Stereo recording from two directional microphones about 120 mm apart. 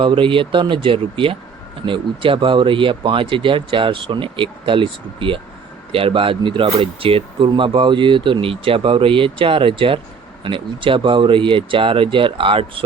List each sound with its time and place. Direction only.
0.0 s speech: 45° right (ahead or behind)